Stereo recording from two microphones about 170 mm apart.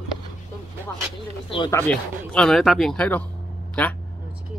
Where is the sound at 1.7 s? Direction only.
10° left (ahead or behind).